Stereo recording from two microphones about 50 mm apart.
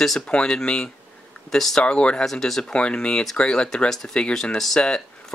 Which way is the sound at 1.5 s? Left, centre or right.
Centre.